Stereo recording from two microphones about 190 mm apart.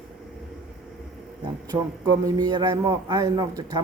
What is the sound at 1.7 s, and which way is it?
A man's voice, 20° right (ahead or behind).